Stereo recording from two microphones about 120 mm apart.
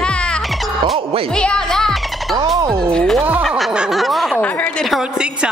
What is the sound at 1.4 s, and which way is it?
Speech, 5° left (ahead or behind).